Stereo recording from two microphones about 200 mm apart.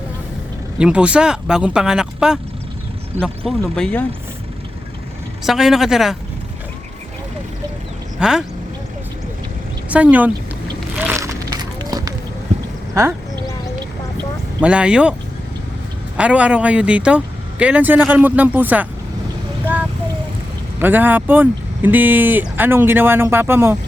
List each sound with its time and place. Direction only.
0.8 s speech: 5° right (ahead or behind)
5.5 s speech: centre (ahead or behind)
8.2 s speech: 5° right (ahead or behind)
9.9 s speech: 5° right (ahead or behind)
11.0 s a sound: 10° right (ahead or behind)
14.6 s speech: 5° right (ahead or behind)
16.1 s speech: 5° right (ahead or behind)
20.7 s speech: 10° right (ahead or behind)